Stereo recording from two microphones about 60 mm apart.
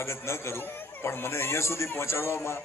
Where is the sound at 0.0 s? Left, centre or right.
Left.